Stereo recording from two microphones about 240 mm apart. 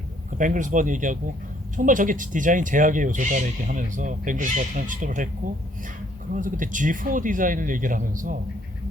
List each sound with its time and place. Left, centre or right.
0.3 s speech: right
6.3 s speech: right